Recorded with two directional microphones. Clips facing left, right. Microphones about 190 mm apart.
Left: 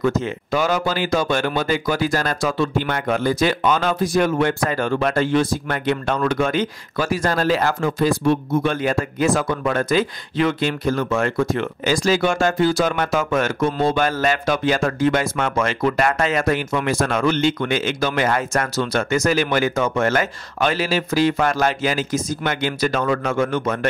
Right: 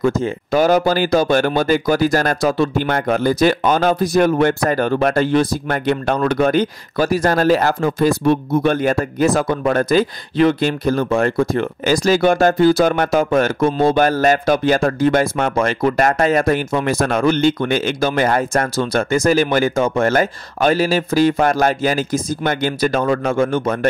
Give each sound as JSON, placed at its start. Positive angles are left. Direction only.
{"t": 0.0, "sound": "speech", "side_deg": -35}
{"t": 8.0, "sound": "speech", "side_deg": -50}
{"t": 17.0, "sound": "speech", "side_deg": -50}
{"t": 23.0, "sound": "speech", "side_deg": -35}